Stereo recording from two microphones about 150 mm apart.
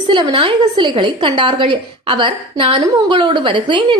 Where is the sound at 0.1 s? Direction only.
30° right (ahead or behind).